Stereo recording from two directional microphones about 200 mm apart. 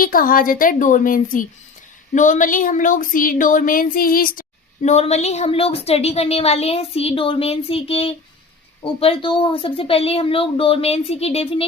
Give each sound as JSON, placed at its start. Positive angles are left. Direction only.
{"t": 0.0, "sound": "a woman's voice", "side_deg": 45}